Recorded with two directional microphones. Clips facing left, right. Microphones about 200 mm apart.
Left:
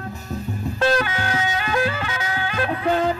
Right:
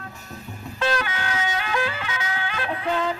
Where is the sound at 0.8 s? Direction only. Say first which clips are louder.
Left 4 dB; 40° left (ahead or behind).